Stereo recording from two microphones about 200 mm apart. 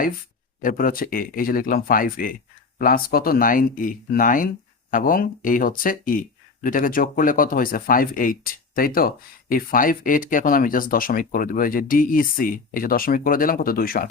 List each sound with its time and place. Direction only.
0.6 s speech: 45° left (ahead or behind)